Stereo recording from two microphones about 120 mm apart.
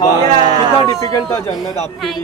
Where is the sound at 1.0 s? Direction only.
30° left (ahead or behind).